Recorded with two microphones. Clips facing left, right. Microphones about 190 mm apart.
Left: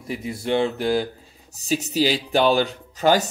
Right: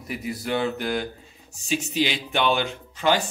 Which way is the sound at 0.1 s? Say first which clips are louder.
Left 4 dB; 25° left (ahead or behind).